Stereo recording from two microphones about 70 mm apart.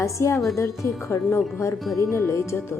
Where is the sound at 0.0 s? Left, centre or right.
Left.